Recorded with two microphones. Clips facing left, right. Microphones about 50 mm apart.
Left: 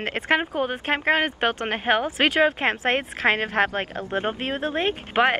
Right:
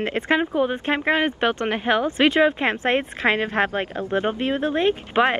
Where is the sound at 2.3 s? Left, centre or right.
Centre.